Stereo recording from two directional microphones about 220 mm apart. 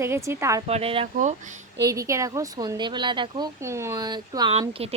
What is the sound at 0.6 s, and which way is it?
Speech, 25° right (ahead or behind).